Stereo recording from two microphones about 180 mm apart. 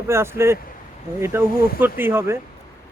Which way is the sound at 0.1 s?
15° right (ahead or behind).